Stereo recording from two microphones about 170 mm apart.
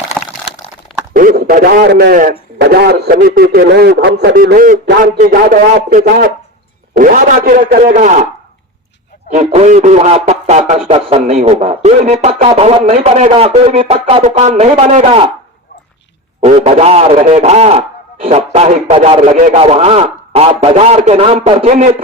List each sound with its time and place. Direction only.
0.2 s a sound: 5° left (ahead or behind)
1.1 s a man's voice: 55° right (ahead or behind)
9.3 s speech: 40° right (ahead or behind)
16.4 s speech: 40° right (ahead or behind)
19.3 s a man's voice: 50° right (ahead or behind)
19.5 s speech: 35° right (ahead or behind)